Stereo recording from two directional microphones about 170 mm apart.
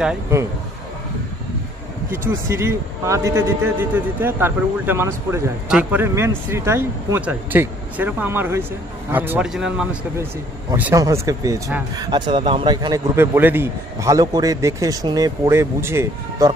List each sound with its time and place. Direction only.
2.0 s a man's voice: 15° right (ahead or behind)
10.7 s speech: 15° right (ahead or behind)
13.1 s a man's voice: 15° right (ahead or behind)